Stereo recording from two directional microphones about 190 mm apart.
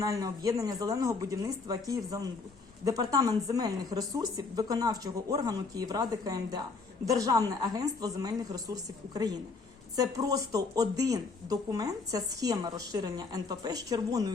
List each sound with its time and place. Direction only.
0.0 s speech: 15° right (ahead or behind)